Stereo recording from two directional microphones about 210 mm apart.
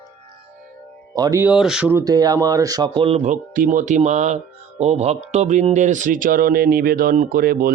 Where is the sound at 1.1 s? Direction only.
15° right (ahead or behind).